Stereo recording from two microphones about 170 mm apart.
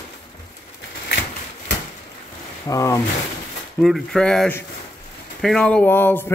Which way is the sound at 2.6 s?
15° left (ahead or behind).